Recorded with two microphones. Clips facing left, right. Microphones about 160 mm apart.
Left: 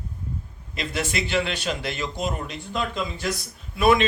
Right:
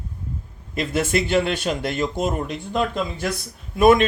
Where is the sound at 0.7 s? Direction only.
50° right (ahead or behind).